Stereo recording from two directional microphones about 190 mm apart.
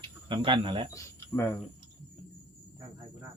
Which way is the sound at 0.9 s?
15° left (ahead or behind).